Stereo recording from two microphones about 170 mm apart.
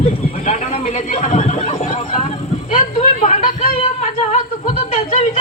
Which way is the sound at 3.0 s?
50° left (ahead or behind).